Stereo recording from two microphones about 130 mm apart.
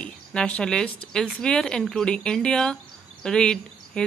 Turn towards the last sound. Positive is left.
turn(degrees=5)  # may be behind; listen again after turning